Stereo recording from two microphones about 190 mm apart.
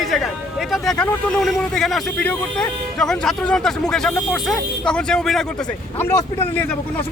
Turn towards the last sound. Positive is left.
turn(degrees=10)  # may be behind; listen again after turning